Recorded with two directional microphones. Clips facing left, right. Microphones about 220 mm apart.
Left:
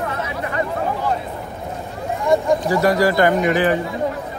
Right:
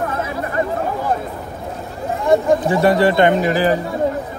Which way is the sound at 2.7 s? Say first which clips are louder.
Right 1 dB; 25° right (ahead or behind).